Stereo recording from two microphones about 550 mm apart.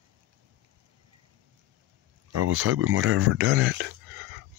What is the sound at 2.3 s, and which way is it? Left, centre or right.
Speech, right.